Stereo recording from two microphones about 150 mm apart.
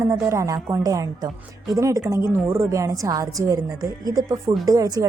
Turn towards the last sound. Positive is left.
turn(degrees=-25)  # may be behind; listen again after turning